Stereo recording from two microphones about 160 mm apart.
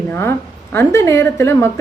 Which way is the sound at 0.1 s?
15° left (ahead or behind).